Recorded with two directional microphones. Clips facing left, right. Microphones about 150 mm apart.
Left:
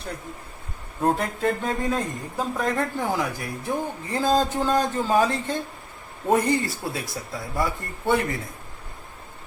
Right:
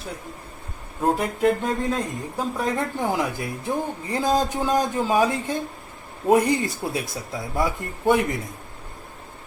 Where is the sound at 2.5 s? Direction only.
15° right (ahead or behind).